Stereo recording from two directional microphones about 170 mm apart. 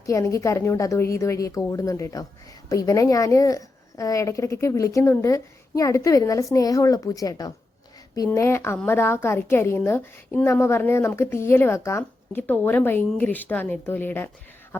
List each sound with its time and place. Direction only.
0.0 s a woman's voice: 20° left (ahead or behind)